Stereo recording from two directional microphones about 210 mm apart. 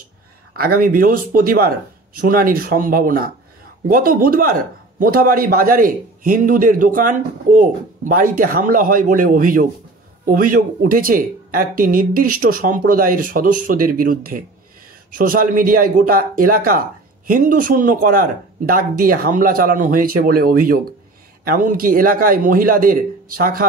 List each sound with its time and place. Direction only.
0.6 s a man's voice: 45° right (ahead or behind)